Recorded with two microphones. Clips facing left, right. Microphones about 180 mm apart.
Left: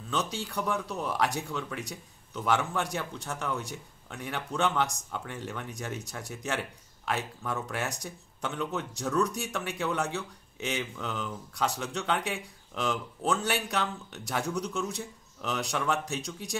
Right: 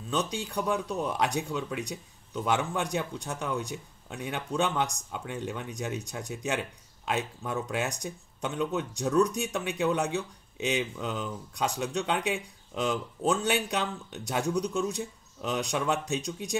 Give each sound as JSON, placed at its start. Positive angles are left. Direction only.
{"t": 0.1, "sound": "speech", "side_deg": -15}